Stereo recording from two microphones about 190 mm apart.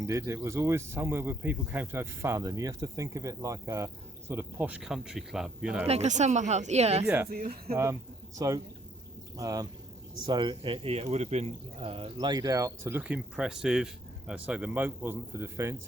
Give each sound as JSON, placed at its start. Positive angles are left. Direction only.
{"t": 0.0, "sound": "speech", "side_deg": -15}
{"t": 5.9, "sound": "speech", "side_deg": -35}
{"t": 7.0, "sound": "speech", "side_deg": -10}
{"t": 7.3, "sound": "speech", "side_deg": -50}
{"t": 7.7, "sound": "speech", "side_deg": -15}